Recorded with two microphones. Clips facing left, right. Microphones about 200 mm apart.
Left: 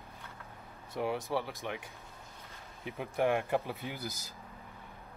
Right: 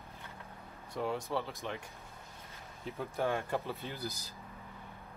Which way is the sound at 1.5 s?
Centre (ahead or behind).